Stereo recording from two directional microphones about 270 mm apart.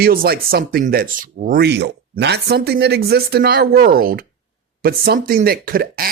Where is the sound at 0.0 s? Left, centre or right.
Right.